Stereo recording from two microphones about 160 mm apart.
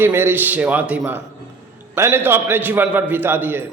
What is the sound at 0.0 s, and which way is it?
A man's voice, 15° right (ahead or behind).